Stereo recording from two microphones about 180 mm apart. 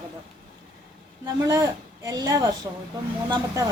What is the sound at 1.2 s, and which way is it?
Speech, 20° right (ahead or behind).